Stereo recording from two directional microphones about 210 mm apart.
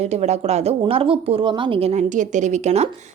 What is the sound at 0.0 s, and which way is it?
Speech, 30° right (ahead or behind).